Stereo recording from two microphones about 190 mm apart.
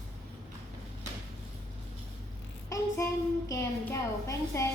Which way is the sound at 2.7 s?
15° left (ahead or behind).